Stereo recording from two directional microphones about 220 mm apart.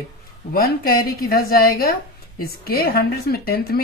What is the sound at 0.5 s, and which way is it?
A woman's voice, 45° left (ahead or behind).